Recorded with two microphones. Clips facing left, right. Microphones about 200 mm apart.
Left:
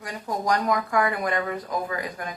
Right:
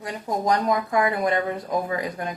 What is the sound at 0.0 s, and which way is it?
Speech, 25° right (ahead or behind).